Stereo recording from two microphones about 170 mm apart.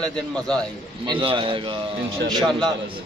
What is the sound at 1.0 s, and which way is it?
Speech, 30° right (ahead or behind).